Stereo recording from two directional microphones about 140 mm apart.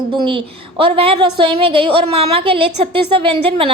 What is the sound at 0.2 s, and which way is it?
A woman's voice, 35° right (ahead or behind).